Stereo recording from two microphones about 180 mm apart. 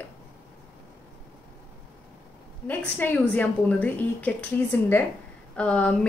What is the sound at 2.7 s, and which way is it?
A woman's voice, 10° left (ahead or behind).